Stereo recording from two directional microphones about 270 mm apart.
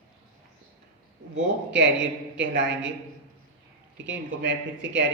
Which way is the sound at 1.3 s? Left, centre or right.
Right.